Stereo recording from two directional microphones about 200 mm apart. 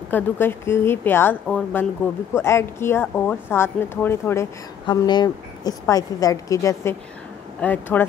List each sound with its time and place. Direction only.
0.1 s speech: 10° left (ahead or behind)